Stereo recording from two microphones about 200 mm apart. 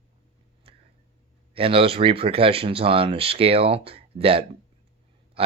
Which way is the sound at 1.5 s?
25° right (ahead or behind).